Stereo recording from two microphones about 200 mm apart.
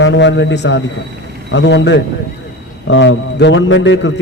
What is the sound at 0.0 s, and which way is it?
A man's voice, 65° left (ahead or behind).